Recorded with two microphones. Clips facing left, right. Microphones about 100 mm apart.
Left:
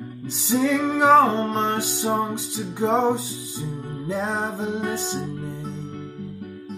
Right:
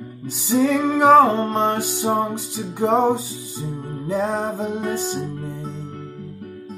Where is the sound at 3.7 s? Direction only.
35° right (ahead or behind).